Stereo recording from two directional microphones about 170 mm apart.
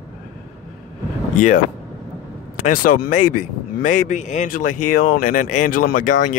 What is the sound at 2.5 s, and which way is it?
Speech, 55° left (ahead or behind).